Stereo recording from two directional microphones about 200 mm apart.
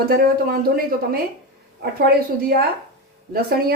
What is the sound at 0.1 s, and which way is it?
Speech, 50° right (ahead or behind).